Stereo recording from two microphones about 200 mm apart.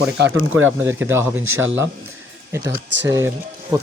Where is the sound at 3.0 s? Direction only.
15° right (ahead or behind).